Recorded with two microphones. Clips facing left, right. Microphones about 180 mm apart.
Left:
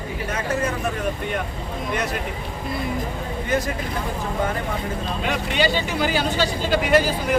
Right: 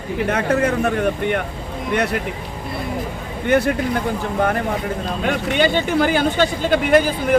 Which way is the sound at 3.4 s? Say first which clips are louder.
Right 7 dB; 65° right (ahead or behind).